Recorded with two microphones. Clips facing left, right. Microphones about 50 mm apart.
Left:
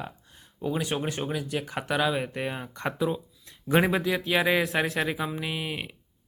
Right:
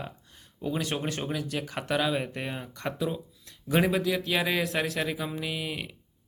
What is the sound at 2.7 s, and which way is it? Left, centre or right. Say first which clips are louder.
Speech: left 3 dB; left.